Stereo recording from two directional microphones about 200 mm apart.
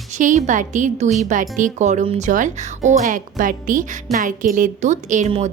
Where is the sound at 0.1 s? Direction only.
40° right (ahead or behind).